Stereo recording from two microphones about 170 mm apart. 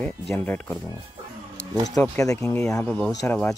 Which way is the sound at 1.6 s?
90° left.